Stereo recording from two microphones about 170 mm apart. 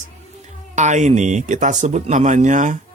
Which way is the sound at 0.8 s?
45° right (ahead or behind).